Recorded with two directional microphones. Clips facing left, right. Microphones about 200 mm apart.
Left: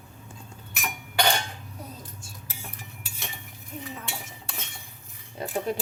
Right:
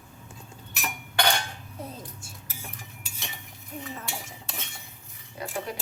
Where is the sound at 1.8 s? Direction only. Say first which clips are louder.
Right 6 dB; 25° right (ahead or behind).